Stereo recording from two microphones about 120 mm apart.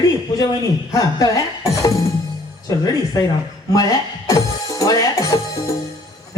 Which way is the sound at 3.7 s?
30° left (ahead or behind).